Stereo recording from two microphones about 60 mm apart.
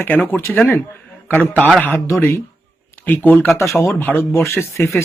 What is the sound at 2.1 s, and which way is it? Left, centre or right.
Speech, left.